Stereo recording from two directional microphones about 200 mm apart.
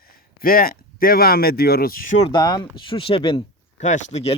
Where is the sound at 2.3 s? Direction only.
20° left (ahead or behind).